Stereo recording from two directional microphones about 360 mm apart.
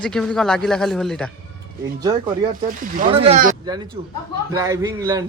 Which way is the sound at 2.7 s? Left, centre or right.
Centre.